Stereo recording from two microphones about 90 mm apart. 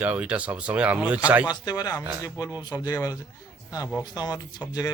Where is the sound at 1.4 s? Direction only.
50° left (ahead or behind).